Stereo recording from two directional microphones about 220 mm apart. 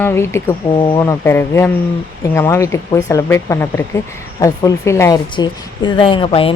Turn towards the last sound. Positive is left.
turn(degrees=25)  # may be behind; listen again after turning